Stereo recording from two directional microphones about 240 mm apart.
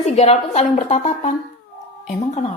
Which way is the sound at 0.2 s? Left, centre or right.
Left.